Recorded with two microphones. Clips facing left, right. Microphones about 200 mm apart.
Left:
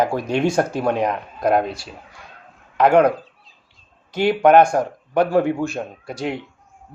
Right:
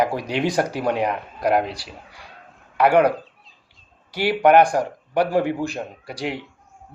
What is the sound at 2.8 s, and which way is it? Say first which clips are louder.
Speech: left 2 dB; 10° right (ahead or behind).